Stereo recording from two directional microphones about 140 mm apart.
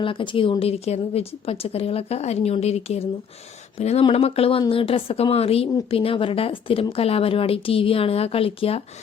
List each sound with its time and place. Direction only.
0.0 s a woman's voice: 35° left (ahead or behind)